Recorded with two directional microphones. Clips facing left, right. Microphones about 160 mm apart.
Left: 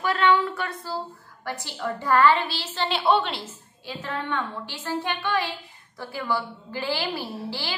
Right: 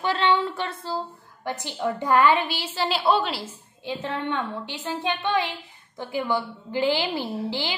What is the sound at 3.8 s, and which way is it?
A woman's voice, 20° right (ahead or behind).